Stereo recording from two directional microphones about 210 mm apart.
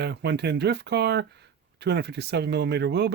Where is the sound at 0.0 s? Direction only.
55° right (ahead or behind).